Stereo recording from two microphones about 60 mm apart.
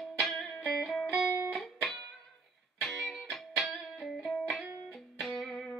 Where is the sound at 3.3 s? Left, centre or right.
Centre.